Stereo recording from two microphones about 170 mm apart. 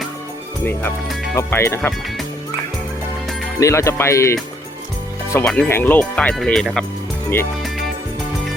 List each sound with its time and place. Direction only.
0.6 s speech: 10° left (ahead or behind)
1.1 s music: centre (ahead or behind)
1.4 s speech: 15° left (ahead or behind)
3.6 s speech: 15° left (ahead or behind)